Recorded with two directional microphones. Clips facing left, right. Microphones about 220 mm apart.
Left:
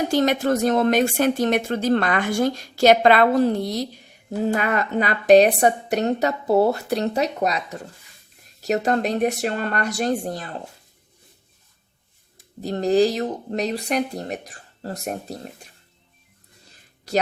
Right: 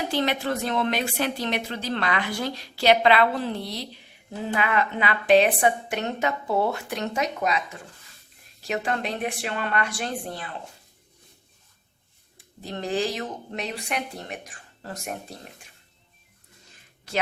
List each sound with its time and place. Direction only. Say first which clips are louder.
0.0 s a woman's voice: left 6 dB; 45° left (ahead or behind)
12.4 s speech: left 8 dB; 40° left (ahead or behind)
16.6 s a sound: left 8 dB; 35° left (ahead or behind)